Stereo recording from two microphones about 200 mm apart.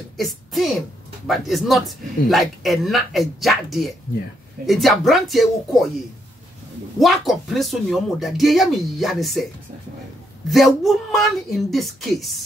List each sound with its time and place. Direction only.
0.2 s a man's voice: centre (ahead or behind)
7.0 s a man's voice: centre (ahead or behind)
10.5 s a man's voice: centre (ahead or behind)